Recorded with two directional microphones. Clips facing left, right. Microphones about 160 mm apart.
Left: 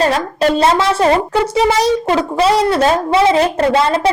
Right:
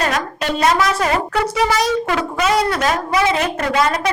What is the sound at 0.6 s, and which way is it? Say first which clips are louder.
Speech: left 1 dB; 30° left (ahead or behind).